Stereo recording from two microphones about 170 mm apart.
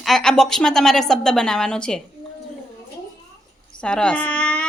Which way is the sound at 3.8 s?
5° left (ahead or behind).